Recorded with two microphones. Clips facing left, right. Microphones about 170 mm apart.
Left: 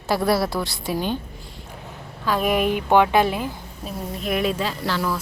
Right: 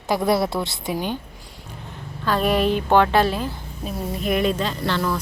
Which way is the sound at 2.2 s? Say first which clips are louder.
Right 1 dB; 10° left (ahead or behind).